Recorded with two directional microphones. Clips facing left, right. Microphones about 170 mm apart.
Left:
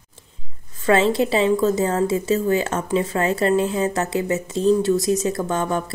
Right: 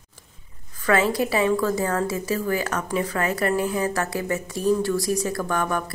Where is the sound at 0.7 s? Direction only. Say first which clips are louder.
Left 4 dB; 25° left (ahead or behind).